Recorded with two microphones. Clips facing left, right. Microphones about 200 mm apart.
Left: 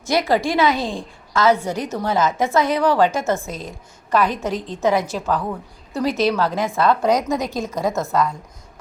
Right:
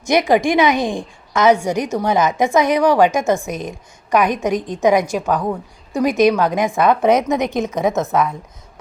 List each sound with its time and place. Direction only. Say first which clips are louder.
0.0 s a woman's voice: right 4 dB; 15° right (ahead or behind)